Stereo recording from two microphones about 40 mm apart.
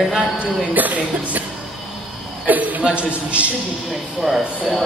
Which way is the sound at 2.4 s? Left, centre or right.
Right.